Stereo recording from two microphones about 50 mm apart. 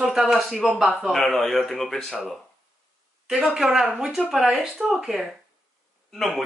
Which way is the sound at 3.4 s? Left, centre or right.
Centre.